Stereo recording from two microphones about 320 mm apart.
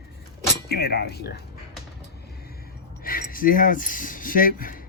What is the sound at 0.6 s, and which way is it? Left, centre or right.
Wind chime, left.